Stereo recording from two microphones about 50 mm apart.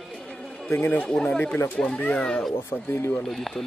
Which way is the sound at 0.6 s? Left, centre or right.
Left.